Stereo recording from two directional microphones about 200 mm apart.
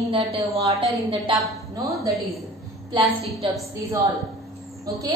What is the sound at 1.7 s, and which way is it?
Speech, 15° right (ahead or behind).